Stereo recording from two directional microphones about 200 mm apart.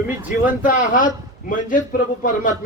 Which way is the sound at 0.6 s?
40° left (ahead or behind).